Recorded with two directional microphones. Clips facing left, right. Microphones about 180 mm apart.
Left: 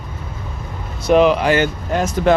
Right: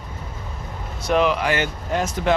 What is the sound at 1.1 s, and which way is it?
Speech, 25° left (ahead or behind).